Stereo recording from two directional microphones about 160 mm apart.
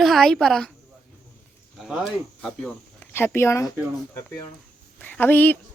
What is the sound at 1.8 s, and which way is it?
Speech, centre (ahead or behind).